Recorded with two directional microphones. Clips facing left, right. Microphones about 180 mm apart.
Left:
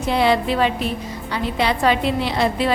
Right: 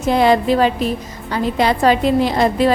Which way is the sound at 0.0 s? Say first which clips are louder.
Right 4 dB; 45° right (ahead or behind).